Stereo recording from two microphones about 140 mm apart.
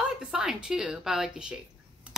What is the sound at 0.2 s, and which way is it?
A woman's voice, 5° right (ahead or behind).